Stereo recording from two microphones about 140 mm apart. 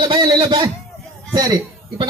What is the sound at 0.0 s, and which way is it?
A man's voice, 35° right (ahead or behind).